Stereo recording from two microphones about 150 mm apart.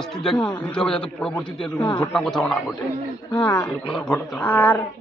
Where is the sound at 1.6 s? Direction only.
30° left (ahead or behind).